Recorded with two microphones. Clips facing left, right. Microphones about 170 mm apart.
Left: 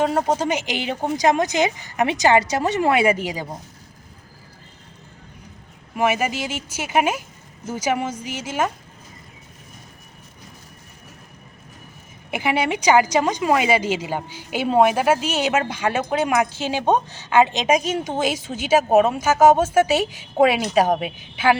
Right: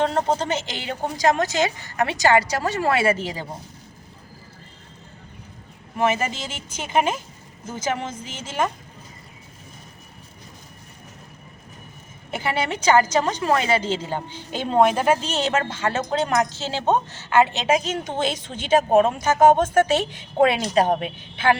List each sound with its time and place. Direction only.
0.0 s a woman's voice: 10° left (ahead or behind)
6.0 s a woman's voice: 10° left (ahead or behind)
12.3 s a woman's voice: 15° left (ahead or behind)